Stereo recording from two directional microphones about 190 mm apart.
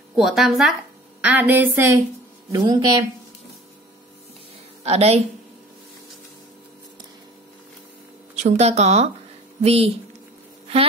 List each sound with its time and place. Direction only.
0.1 s a woman's voice: centre (ahead or behind); by 3.1 s 25° right (ahead or behind)
4.8 s a woman's voice: 35° right (ahead or behind)
8.4 s a woman's voice: 35° right (ahead or behind)